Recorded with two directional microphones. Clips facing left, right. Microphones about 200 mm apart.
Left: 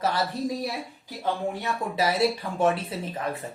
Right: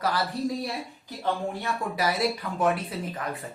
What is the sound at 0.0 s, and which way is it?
Speech, 25° left (ahead or behind).